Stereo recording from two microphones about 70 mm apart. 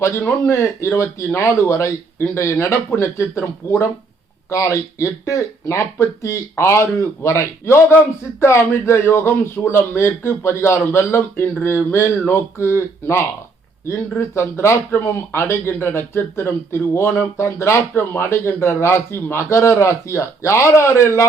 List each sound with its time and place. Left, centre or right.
0.0 s speech: left